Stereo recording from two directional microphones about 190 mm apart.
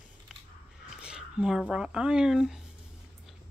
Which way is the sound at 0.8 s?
5° right (ahead or behind).